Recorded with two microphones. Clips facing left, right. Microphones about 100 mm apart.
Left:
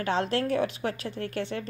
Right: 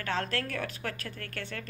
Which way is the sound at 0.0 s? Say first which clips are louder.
Left 6 dB; 30° left (ahead or behind).